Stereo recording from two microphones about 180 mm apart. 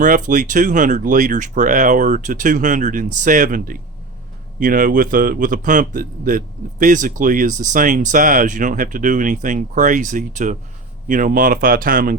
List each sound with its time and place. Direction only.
0.0 s a man's voice: 45° right (ahead or behind)